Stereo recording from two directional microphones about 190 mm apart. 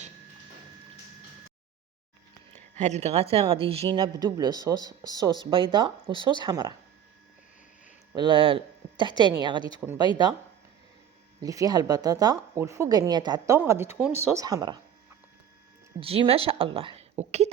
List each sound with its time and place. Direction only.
2.7 s speech: 35° right (ahead or behind); by 6.7 s 20° right (ahead or behind)
8.1 s speech: 25° right (ahead or behind)
11.3 s speech: 20° right (ahead or behind)
16.0 s speech: 30° right (ahead or behind)